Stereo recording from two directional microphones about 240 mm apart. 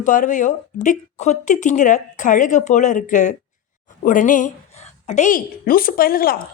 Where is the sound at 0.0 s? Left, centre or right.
Left.